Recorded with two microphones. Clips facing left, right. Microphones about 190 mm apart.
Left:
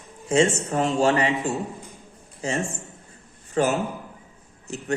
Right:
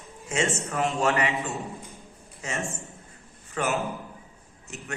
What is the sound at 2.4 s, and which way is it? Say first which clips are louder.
A man's voice: left 6 dB; 30° left (ahead or behind).